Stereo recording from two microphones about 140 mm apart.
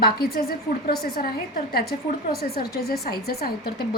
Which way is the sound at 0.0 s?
90° left.